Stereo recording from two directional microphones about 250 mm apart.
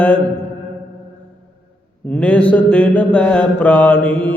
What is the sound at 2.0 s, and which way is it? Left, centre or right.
Mantra, centre.